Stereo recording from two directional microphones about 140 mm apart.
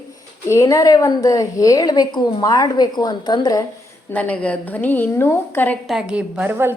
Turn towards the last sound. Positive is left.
turn(degrees=-15)  # may be behind; listen again after turning